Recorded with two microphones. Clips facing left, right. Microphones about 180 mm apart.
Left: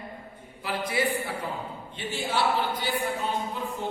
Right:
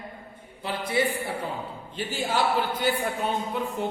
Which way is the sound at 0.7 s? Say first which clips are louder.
Right 2 dB; 25° right (ahead or behind).